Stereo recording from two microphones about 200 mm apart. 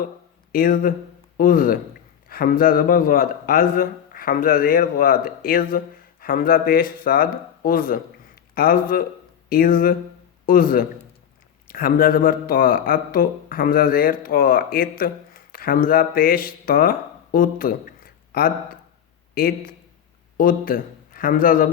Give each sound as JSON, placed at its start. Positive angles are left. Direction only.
{"t": 0.5, "sound": "a man's voice", "side_deg": 45}